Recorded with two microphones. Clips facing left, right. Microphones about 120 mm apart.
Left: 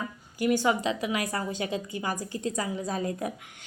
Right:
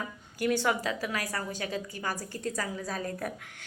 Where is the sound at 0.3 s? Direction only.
10° left (ahead or behind).